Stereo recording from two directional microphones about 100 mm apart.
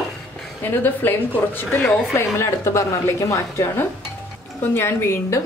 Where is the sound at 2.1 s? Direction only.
30° left (ahead or behind).